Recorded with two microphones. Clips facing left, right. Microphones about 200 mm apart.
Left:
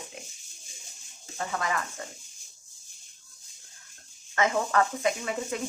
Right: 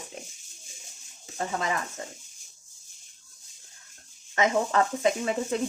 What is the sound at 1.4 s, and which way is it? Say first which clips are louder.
Speech: right 1 dB; 25° right (ahead or behind).